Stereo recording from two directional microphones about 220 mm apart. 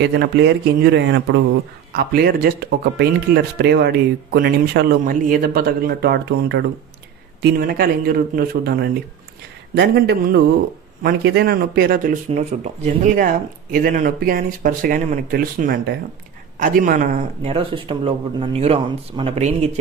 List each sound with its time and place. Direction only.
0.0 s speech: 50° right (ahead or behind)
17.5 s speech: 25° right (ahead or behind)